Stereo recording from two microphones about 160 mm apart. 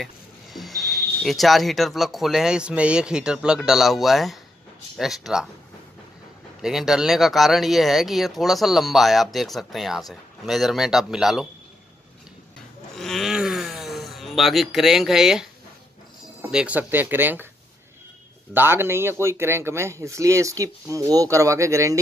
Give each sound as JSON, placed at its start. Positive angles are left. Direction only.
{"t": 0.0, "sound": "speech", "side_deg": 0}
{"t": 6.6, "sound": "speech", "side_deg": -5}
{"t": 12.9, "sound": "groan", "side_deg": 0}
{"t": 16.4, "sound": "speech", "side_deg": -5}
{"t": 18.5, "sound": "speech", "side_deg": -15}